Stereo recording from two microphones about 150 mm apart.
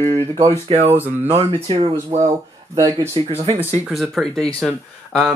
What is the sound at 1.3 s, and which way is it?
Speech, 40° right (ahead or behind).